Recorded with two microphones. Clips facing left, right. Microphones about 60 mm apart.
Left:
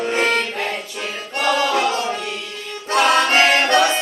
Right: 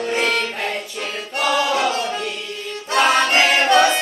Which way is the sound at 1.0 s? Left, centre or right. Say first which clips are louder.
Even; centre.